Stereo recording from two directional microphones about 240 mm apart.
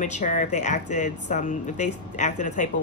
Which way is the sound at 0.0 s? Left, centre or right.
Left.